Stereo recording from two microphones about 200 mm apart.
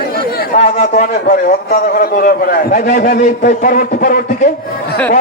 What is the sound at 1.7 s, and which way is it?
A man's voice, 45° left (ahead or behind).